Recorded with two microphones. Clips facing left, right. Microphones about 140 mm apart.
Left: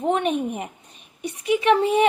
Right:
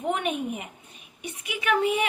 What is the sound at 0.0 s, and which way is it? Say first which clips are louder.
Speech: left 6 dB; 30° left (ahead or behind).